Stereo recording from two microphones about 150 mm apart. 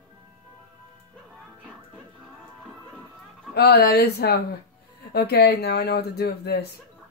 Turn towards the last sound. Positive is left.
turn(degrees=90)